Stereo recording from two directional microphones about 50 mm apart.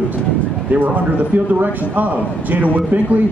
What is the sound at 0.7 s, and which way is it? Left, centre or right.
A man's voice, right.